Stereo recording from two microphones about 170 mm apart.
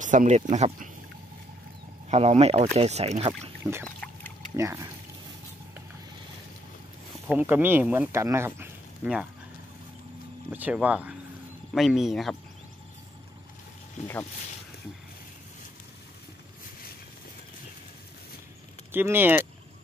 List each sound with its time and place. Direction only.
0.0 s speech: 50° right (ahead or behind)
2.0 s speech: 35° right (ahead or behind)
3.8 s pour: 10° left (ahead or behind)
4.6 s speech: 20° right (ahead or behind)
7.2 s speech: 10° right (ahead or behind)
10.5 s speech: 10° right (ahead or behind)
18.9 s speech: 10° right (ahead or behind)